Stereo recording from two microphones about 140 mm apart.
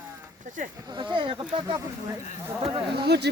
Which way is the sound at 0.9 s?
35° right (ahead or behind).